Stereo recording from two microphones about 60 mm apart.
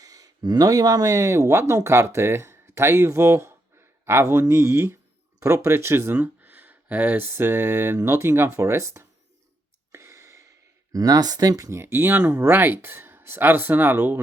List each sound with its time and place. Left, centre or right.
0.0 s speech: right
7.2 s speech: right
9.9 s a sound: right
10.9 s speech: right
11.7 s speech: right